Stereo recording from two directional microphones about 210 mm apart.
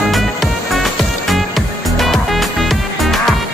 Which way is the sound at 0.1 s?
Centre (ahead or behind).